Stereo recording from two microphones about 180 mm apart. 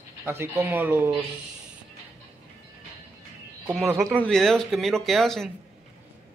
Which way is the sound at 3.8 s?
15° right (ahead or behind).